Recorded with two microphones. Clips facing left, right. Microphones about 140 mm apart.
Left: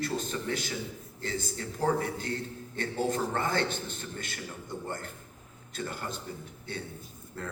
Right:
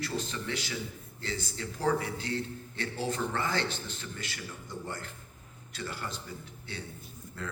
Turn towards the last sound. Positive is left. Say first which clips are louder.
# left 1 dB
turn(degrees=50)  # may be behind; listen again after turning